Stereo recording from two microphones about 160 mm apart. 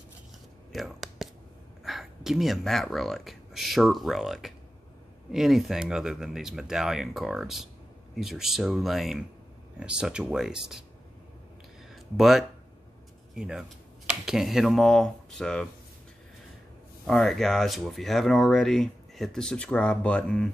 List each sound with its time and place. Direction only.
0.7 s a sound: centre (ahead or behind)
1.9 s speech: centre (ahead or behind)
11.9 s speech: centre (ahead or behind)
17.0 s speech: centre (ahead or behind)